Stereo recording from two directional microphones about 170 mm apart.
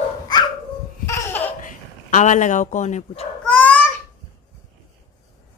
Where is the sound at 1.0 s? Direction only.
15° left (ahead or behind).